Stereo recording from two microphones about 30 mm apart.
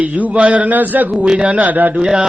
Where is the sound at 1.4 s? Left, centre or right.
Right.